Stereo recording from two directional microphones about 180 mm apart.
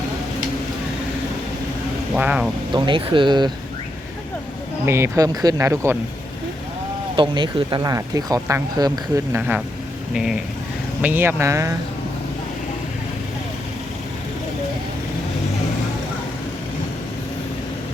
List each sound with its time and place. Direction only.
2.1 s speech: 5° right (ahead or behind)
2.7 s speech: 25° right (ahead or behind)
4.9 s speech: 15° right (ahead or behind)
7.2 s speech: 25° right (ahead or behind)
11.0 s speech: 10° right (ahead or behind)